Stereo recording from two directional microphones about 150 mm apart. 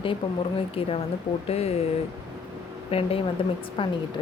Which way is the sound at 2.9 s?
45° left (ahead or behind).